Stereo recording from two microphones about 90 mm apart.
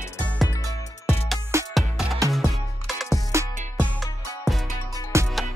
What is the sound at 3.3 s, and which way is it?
Music, 30° right (ahead or behind).